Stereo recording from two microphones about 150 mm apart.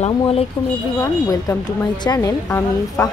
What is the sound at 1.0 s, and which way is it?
A woman's voice, 20° left (ahead or behind).